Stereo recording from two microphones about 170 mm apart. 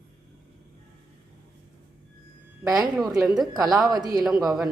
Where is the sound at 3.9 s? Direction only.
25° right (ahead or behind).